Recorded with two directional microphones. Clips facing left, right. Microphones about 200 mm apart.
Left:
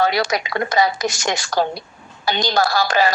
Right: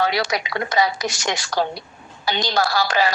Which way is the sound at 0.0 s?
45° left (ahead or behind).